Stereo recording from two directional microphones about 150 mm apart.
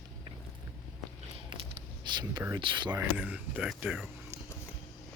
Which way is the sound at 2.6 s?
35° right (ahead or behind).